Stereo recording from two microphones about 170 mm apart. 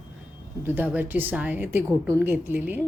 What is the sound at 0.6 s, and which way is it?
A woman's voice, 10° right (ahead or behind).